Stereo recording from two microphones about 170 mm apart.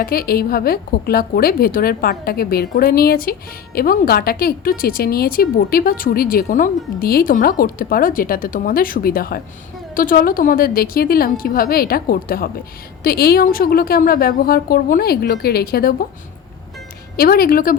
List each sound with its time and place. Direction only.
0.0 s a woman's voice: 60° left (ahead or behind)
17.2 s a woman's voice: 60° left (ahead or behind)